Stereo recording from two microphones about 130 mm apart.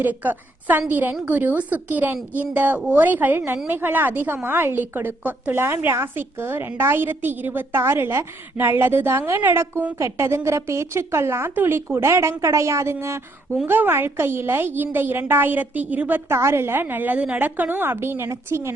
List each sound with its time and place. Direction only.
0.0 s a woman's voice: 15° right (ahead or behind)